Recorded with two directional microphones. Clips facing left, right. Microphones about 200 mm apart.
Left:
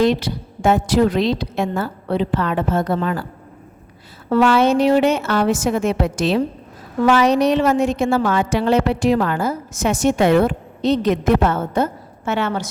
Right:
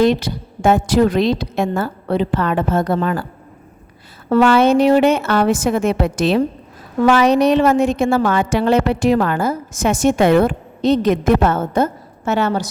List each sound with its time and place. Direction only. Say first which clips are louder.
0.0 s a woman's voice: right 2 dB; 50° right (ahead or behind)
4.3 s a woman's voice: right 2 dB; 55° right (ahead or behind)